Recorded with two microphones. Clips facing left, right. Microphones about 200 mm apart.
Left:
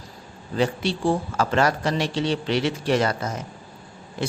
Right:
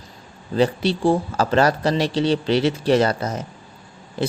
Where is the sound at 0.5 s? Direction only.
30° right (ahead or behind).